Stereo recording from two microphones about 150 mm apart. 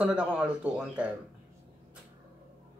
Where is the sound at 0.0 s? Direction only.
10° right (ahead or behind).